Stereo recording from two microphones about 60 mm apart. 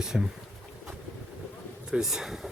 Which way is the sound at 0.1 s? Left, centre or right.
Centre.